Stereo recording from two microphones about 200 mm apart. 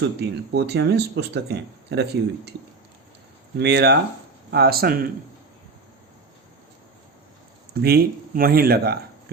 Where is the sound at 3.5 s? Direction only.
55° right (ahead or behind).